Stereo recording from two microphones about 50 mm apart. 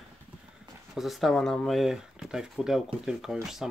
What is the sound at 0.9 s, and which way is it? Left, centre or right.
Speech, centre.